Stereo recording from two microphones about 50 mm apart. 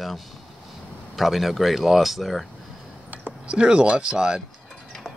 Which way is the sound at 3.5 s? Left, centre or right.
Right.